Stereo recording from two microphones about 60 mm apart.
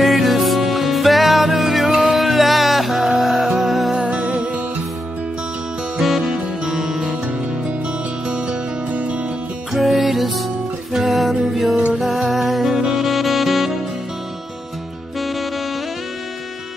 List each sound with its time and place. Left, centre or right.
0.0 s music: centre
4.0 s music: centre
5.9 s music: centre
9.7 s music: centre
15.1 s music: centre